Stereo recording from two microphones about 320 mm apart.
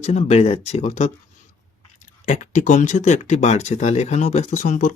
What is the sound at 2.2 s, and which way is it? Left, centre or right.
Speech, left.